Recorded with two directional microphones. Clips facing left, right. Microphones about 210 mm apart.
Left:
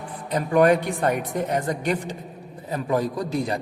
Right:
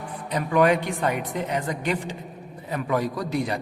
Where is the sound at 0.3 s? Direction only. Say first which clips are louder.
Left 2 dB; 40° left (ahead or behind).